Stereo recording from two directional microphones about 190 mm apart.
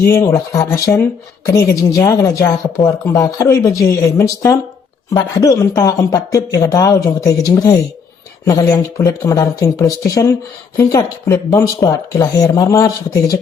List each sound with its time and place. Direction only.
0.1 s speech: 15° left (ahead or behind)